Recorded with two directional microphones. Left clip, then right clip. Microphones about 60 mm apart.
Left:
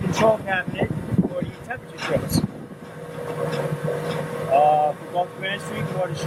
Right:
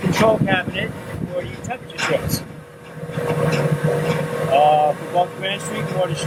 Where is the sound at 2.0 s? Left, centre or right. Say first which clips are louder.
Right 4 dB; right.